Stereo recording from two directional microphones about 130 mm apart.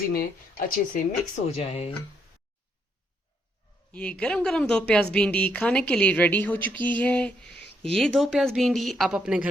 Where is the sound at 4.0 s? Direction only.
10° left (ahead or behind).